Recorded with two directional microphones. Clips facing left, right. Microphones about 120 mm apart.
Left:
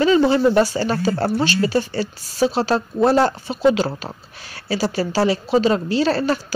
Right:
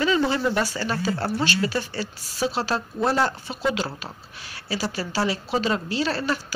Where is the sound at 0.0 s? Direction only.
30° left (ahead or behind).